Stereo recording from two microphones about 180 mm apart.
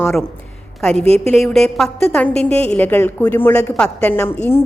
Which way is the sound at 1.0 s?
35° right (ahead or behind).